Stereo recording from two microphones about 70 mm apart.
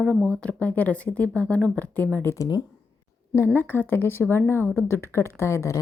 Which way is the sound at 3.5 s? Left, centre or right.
Left.